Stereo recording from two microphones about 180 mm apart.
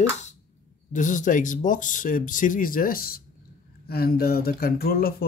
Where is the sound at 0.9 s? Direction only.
45° left (ahead or behind).